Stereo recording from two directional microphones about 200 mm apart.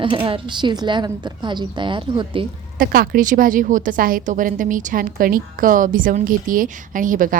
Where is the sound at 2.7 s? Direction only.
45° right (ahead or behind).